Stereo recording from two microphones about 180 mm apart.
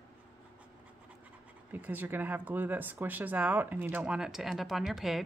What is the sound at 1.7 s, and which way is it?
A woman's voice, 10° right (ahead or behind).